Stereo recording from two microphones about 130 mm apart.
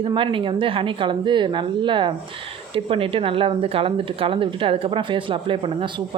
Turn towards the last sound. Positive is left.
turn(degrees=-40)  # may be behind; listen again after turning